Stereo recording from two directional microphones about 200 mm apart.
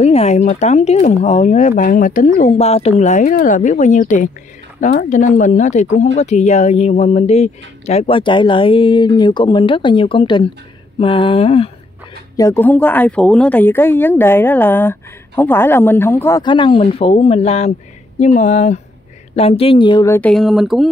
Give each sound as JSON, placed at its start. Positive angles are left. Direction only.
{"t": 0.0, "sound": "speech", "side_deg": 30}
{"t": 2.5, "sound": "speech", "side_deg": 30}
{"t": 12.4, "sound": "speech", "side_deg": 15}
{"t": 20.2, "sound": "speech", "side_deg": 5}